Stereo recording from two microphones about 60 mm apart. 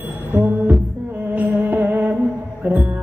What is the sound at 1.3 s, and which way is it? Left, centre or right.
Music, right.